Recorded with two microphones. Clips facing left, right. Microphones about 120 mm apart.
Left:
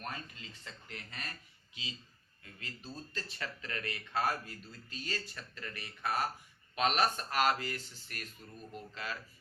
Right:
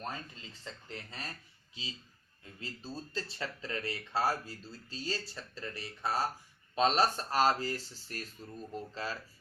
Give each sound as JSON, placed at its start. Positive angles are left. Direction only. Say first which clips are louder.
{"t": 0.6, "sound": "speech", "louder": "right 5 dB", "side_deg": -30}